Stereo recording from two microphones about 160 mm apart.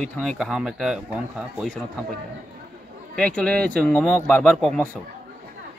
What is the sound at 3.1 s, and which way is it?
Speech, 5° left (ahead or behind).